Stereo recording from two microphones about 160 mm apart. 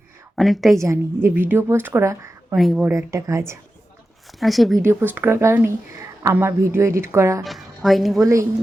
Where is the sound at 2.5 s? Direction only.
Centre (ahead or behind).